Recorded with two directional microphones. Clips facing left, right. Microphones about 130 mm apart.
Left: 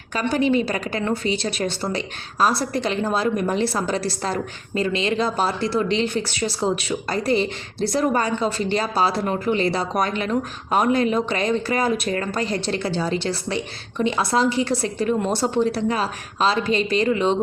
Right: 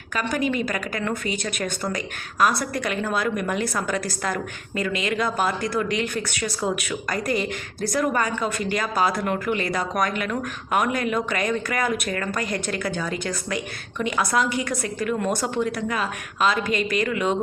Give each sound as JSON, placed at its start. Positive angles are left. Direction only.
{"t": 0.2, "sound": "a woman's voice", "side_deg": 30}